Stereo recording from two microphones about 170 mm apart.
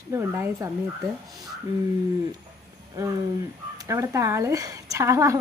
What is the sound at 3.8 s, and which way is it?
A woman's voice, 20° right (ahead or behind).